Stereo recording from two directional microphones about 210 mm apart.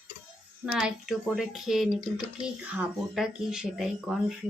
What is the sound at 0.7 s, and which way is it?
Speech, centre (ahead or behind).